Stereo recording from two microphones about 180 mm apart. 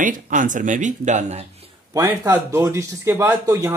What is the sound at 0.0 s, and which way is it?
Speech, 45° right (ahead or behind).